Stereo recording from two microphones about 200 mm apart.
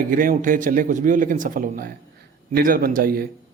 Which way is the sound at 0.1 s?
45° right (ahead or behind).